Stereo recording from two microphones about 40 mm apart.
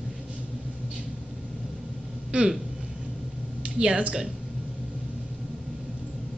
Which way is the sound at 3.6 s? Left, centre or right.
Right.